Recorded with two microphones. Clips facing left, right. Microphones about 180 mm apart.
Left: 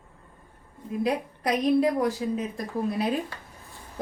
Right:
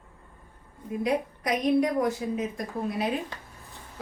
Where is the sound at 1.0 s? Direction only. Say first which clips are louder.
Even; 30° left (ahead or behind).